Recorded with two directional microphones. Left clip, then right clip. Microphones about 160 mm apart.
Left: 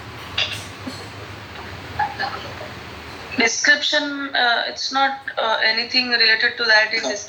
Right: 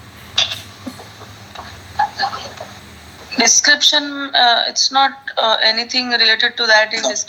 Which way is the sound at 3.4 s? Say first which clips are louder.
Right 4 dB; 45° right (ahead or behind).